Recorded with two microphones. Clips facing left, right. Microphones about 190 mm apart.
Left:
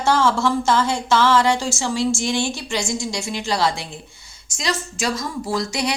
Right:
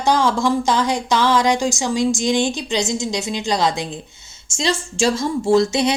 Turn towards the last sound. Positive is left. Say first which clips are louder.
# right 8 dB
turn(degrees=-25)  # may be behind; listen again after turning